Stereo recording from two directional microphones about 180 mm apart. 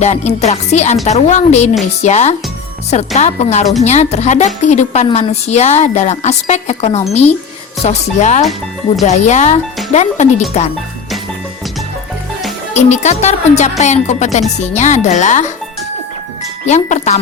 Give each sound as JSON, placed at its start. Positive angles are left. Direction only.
{"t": 0.0, "sound": "a woman's voice", "side_deg": 40}
{"t": 12.7, "sound": "a woman's voice", "side_deg": 40}
{"t": 16.6, "sound": "a woman's voice", "side_deg": 40}